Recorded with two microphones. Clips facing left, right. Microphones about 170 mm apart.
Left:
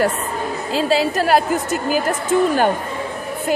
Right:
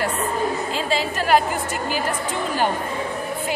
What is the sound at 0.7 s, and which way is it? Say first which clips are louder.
A woman's voice: left 6 dB; 40° left (ahead or behind).